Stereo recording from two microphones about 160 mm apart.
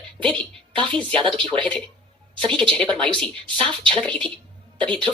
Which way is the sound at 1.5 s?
5° left (ahead or behind).